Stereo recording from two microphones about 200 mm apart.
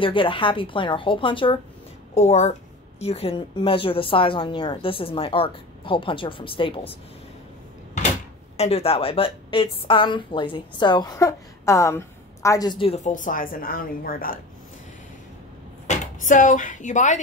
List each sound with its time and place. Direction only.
0.0 s a woman's voice: 25° left (ahead or behind)
8.5 s a woman's voice: 30° left (ahead or behind)
15.9 s speech: 40° left (ahead or behind)